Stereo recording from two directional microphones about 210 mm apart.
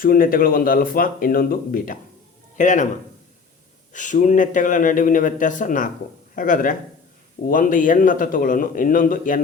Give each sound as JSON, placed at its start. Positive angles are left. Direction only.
{"t": 0.0, "sound": "a man's voice", "side_deg": 45}